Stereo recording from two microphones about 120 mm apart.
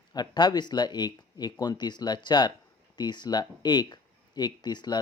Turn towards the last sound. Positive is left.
turn(degrees=35)  # may be behind; listen again after turning